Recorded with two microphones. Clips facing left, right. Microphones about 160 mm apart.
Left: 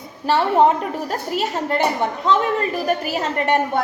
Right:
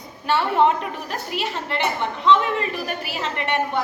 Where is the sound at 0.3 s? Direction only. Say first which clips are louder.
Left 3 dB; 40° left (ahead or behind).